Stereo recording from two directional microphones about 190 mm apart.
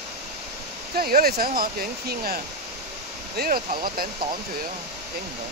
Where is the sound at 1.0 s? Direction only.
50° right (ahead or behind).